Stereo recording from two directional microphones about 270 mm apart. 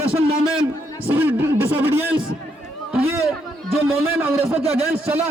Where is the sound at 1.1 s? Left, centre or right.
Centre.